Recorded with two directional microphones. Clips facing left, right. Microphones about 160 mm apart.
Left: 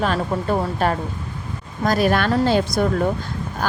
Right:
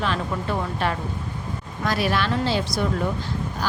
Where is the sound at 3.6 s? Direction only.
50° left (ahead or behind).